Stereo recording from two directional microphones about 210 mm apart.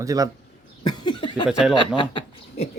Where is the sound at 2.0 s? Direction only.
25° left (ahead or behind).